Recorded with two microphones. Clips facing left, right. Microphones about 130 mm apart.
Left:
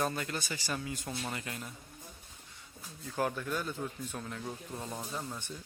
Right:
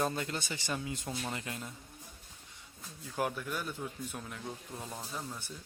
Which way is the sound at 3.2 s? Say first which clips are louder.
Left 2 dB; 10° right (ahead or behind).